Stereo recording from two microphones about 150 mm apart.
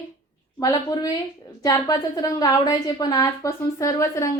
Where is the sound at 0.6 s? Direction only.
25° left (ahead or behind).